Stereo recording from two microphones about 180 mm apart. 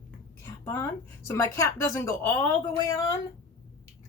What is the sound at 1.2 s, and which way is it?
Speech, 15° left (ahead or behind).